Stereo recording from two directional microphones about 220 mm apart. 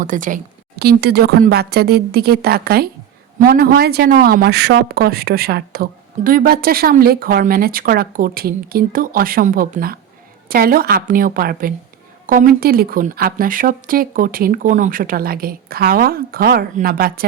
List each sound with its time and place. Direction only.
0.0 s a woman's voice: 35° right (ahead or behind)